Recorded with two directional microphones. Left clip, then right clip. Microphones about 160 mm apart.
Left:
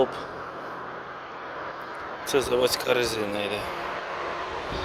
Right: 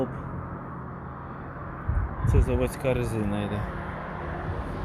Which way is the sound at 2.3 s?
35° left (ahead or behind).